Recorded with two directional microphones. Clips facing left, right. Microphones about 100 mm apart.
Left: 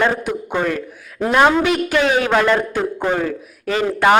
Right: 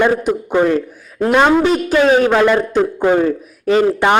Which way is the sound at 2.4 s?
25° right (ahead or behind).